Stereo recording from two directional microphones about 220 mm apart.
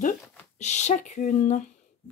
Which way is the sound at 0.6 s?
30° left (ahead or behind).